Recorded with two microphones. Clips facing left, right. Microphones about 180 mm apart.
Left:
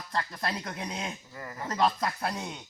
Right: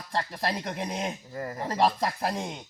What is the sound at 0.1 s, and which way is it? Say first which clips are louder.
A man's voice: right 3 dB; 30° right (ahead or behind).